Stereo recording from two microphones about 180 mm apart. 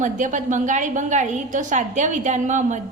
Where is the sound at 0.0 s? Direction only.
45° right (ahead or behind).